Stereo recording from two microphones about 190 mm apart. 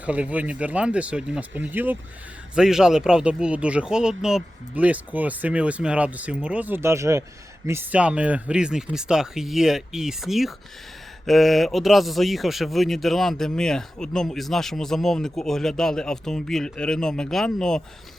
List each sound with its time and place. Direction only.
0.0 s speech: 5° right (ahead or behind)